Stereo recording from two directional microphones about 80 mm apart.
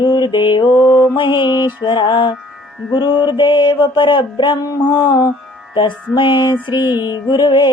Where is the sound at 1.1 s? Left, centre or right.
Left.